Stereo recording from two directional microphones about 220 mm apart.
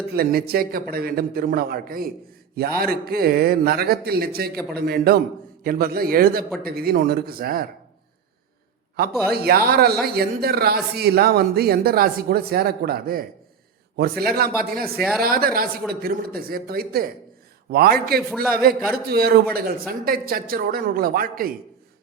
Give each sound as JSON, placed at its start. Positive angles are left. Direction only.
{"t": 0.1, "sound": "a man's voice", "side_deg": -45}
{"t": 9.0, "sound": "a man's voice", "side_deg": -45}